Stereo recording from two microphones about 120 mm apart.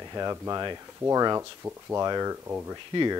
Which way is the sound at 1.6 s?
15° right (ahead or behind).